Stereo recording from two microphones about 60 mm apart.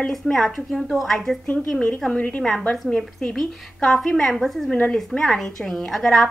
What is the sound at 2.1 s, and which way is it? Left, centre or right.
Speech, left.